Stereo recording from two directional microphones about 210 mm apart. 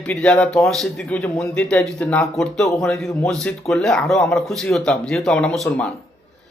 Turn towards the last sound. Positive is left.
turn(degrees=5)  # may be behind; listen again after turning